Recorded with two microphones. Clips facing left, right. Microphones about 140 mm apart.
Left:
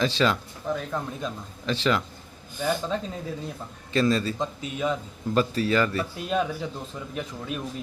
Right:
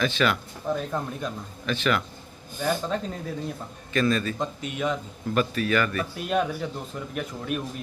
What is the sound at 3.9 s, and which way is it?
Speech, 30° left (ahead or behind).